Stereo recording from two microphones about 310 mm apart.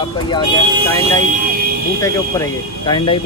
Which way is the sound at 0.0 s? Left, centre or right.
Centre.